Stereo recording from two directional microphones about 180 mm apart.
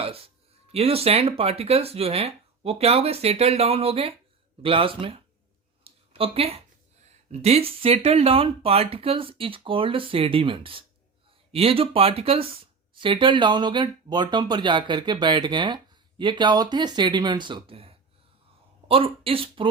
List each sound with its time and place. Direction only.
0.7 s speech: 35° right (ahead or behind)
5.8 s a sound: 30° right (ahead or behind)
7.3 s speech: 35° right (ahead or behind)